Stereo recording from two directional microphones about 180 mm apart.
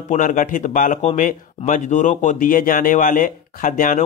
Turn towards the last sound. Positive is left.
turn(degrees=45)  # may be behind; listen again after turning